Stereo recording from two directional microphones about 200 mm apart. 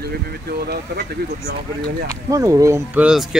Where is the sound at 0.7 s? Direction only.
55° right (ahead or behind).